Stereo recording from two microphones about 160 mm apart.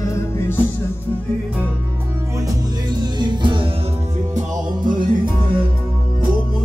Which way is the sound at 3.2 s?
30° right (ahead or behind).